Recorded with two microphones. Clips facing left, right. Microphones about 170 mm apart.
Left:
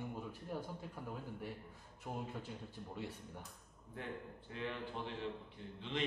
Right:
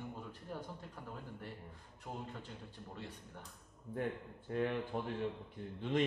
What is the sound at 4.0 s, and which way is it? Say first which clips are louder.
A man's voice: right 6 dB; 50° right (ahead or behind).